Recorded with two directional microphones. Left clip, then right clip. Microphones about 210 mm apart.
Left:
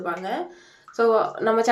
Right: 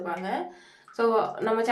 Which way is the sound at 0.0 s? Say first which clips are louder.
Left 3 dB; 10° left (ahead or behind).